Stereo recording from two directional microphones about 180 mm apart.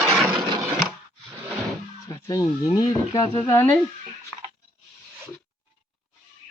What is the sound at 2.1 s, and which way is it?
Speech, 20° left (ahead or behind).